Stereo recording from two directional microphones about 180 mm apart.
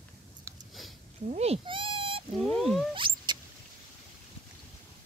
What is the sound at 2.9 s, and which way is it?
Rodents, 25° right (ahead or behind).